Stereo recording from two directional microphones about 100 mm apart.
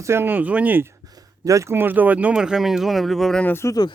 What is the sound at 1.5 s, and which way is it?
Speech, 30° right (ahead or behind).